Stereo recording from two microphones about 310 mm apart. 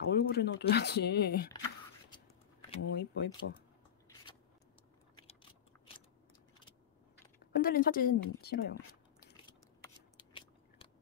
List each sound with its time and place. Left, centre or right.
0.1 s speech: left
2.8 s speech: left
5.2 s a sound: centre
7.5 s a woman's voice: left
10.1 s scissors: centre